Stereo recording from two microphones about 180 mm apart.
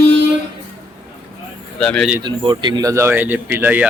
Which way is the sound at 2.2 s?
25° right (ahead or behind).